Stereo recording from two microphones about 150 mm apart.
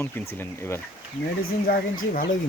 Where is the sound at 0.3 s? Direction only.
15° left (ahead or behind).